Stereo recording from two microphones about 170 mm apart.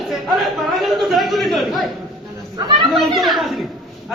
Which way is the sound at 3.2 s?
Centre (ahead or behind).